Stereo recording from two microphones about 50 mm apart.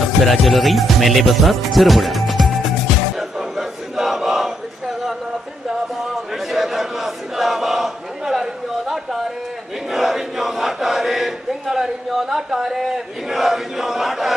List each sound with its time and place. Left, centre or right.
0.3 s speech: centre
3.2 s a sound: centre
6.3 s battle cry: centre
9.9 s chant: centre